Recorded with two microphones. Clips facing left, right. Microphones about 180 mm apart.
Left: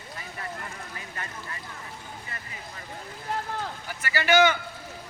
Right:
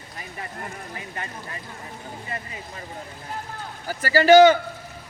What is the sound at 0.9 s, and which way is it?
Speech, 25° right (ahead or behind).